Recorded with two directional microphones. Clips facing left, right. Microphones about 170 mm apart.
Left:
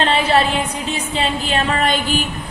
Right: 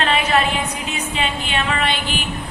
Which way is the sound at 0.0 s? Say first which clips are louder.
Left 3 dB; 30° left (ahead or behind).